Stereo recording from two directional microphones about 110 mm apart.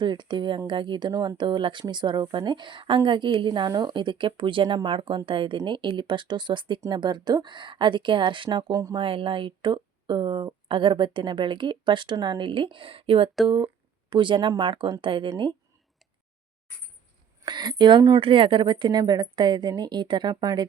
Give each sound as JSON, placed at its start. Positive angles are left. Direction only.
{"t": 0.0, "sound": "a woman's voice", "side_deg": -45}
{"t": 8.7, "sound": "a woman's voice", "side_deg": -35}
{"t": 9.0, "sound": "a woman's voice", "side_deg": -50}
{"t": 15.0, "sound": "a woman's voice", "side_deg": -50}
{"t": 17.4, "sound": "a woman's voice", "side_deg": -40}